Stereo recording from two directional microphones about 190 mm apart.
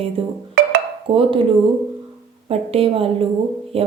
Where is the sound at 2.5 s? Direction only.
30° right (ahead or behind).